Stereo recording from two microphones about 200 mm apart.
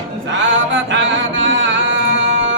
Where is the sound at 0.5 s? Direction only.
65° right (ahead or behind).